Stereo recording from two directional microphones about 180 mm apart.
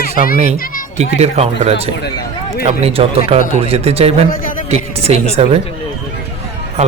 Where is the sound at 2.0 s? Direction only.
60° left (ahead or behind).